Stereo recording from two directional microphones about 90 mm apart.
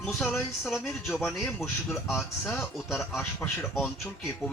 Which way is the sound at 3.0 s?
25° left (ahead or behind).